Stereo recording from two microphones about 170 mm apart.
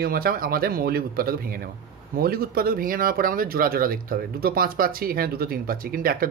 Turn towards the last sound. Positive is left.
turn(degrees=-55)  # may be behind; listen again after turning